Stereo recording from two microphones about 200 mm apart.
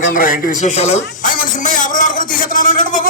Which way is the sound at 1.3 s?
40° left (ahead or behind).